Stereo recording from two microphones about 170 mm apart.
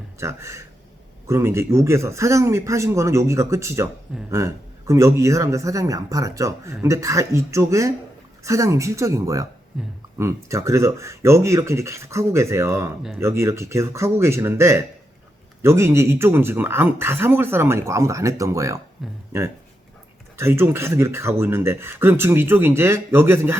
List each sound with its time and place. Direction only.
0.2 s speech: 15° right (ahead or behind)
9.7 s speech: 5° right (ahead or behind)
10.2 s speech: 15° right (ahead or behind)
19.0 s speech: centre (ahead or behind)
20.3 s speech: 15° right (ahead or behind)